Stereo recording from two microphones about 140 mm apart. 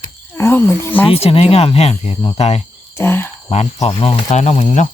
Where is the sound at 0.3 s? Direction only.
15° left (ahead or behind).